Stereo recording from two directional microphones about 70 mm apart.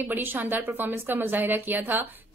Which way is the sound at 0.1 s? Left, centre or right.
Right.